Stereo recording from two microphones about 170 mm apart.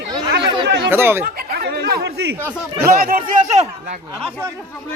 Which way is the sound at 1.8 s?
70° right (ahead or behind).